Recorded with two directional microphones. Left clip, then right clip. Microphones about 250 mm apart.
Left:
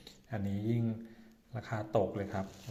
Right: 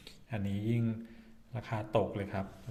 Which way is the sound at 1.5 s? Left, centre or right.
Centre.